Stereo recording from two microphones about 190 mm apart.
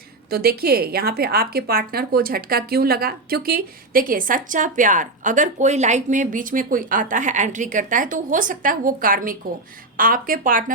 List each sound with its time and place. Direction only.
0.3 s a woman's voice: 55° right (ahead or behind)